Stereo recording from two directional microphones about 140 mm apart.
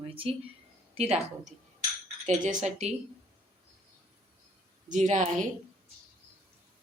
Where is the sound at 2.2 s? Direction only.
60° right (ahead or behind).